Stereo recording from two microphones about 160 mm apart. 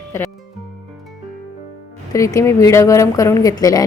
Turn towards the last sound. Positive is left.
turn(degrees=20)  # may be behind; listen again after turning